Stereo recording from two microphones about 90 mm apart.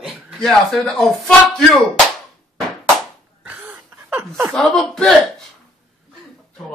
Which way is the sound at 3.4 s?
20° right (ahead or behind).